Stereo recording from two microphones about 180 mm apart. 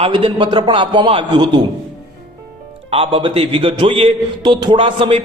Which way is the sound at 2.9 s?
30° right (ahead or behind).